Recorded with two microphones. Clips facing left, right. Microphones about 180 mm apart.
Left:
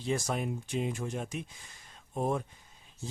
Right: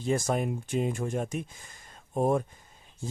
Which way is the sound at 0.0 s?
50° right (ahead or behind).